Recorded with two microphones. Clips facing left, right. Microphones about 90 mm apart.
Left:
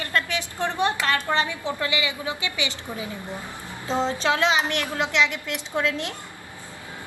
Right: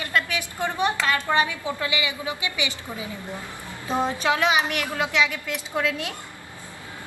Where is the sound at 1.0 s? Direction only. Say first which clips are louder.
Right 1 dB; 15° right (ahead or behind).